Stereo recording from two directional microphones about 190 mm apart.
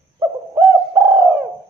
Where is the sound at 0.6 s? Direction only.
15° right (ahead or behind).